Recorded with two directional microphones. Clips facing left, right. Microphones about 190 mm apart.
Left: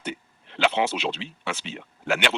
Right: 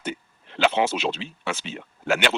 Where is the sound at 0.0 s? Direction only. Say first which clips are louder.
Right 2 dB; 45° right (ahead or behind).